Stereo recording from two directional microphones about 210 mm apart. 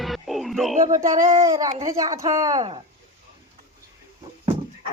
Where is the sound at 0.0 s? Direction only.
Centre (ahead or behind).